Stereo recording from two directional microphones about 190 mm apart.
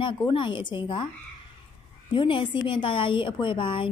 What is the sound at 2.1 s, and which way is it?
A woman's voice, 25° left (ahead or behind).